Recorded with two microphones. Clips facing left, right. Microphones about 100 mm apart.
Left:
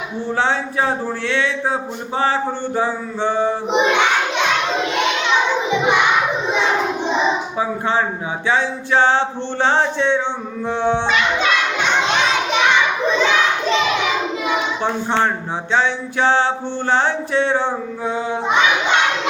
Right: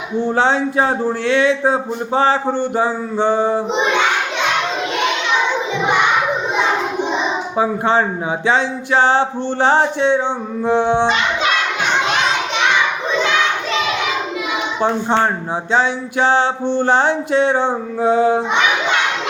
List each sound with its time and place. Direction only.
0.3 s a man's voice: 20° right (ahead or behind)
3.2 s male singing: 45° right (ahead or behind)
8.4 s a man's voice: 20° right (ahead or behind)
9.6 s a sound: 15° right (ahead or behind)
14.8 s a sound: 15° right (ahead or behind)
18.0 s child singing: 35° right (ahead or behind)